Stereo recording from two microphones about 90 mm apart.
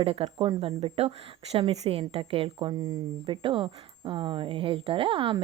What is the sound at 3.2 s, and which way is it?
A woman's voice, 70° right (ahead or behind).